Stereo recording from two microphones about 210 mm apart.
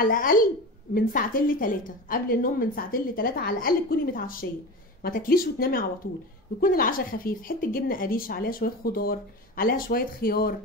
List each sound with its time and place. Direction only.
0.0 s a child's voice: 40° left (ahead or behind)